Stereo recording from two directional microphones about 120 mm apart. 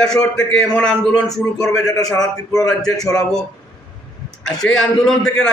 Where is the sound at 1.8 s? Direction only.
30° left (ahead or behind).